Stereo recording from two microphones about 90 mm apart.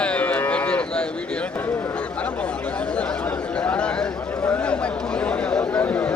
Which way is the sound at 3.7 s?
10° left (ahead or behind).